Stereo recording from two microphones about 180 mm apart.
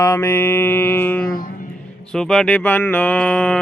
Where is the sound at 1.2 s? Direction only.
55° left (ahead or behind).